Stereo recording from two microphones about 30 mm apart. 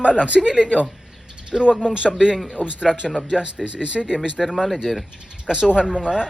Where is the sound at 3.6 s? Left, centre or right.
Right.